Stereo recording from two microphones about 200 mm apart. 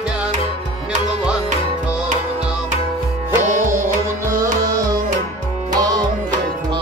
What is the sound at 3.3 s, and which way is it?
Music, 35° right (ahead or behind).